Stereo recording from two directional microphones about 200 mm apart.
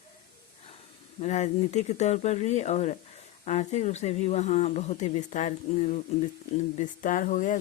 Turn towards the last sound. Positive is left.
turn(degrees=40)  # may be behind; listen again after turning